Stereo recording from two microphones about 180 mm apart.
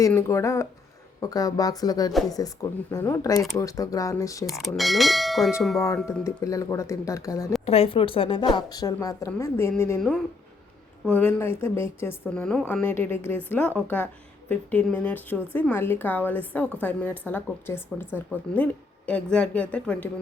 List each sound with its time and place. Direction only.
0.1 s a woman's voice: 15° left (ahead or behind)
4.4 s clang: centre (ahead or behind)
5.8 s a woman's voice: 15° left (ahead or behind)
7.6 s a woman's voice: 35° left (ahead or behind); by 10.0 s 15° left (ahead or behind)
11.0 s a woman's voice: 10° left (ahead or behind)